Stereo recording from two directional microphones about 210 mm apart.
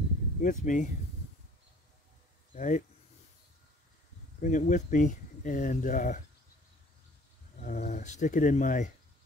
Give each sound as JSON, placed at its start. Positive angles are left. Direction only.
{"t": 0.4, "sound": "speech", "side_deg": 35}
{"t": 2.5, "sound": "speech", "side_deg": 35}
{"t": 4.4, "sound": "speech", "side_deg": 35}
{"t": 7.6, "sound": "speech", "side_deg": 40}